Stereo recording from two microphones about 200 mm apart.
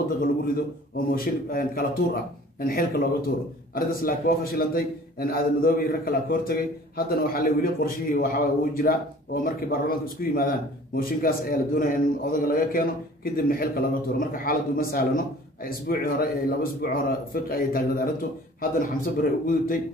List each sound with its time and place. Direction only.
0.2 s a man's voice: 50° left (ahead or behind)